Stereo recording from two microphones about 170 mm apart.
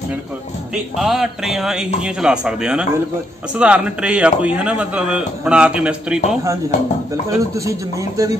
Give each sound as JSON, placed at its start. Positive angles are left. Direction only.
{"t": 0.9, "sound": "a sound", "side_deg": 0}
{"t": 3.5, "sound": "speech", "side_deg": -5}
{"t": 7.2, "sound": "speech", "side_deg": -20}